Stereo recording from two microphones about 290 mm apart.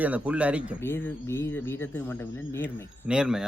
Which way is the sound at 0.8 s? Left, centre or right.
Centre.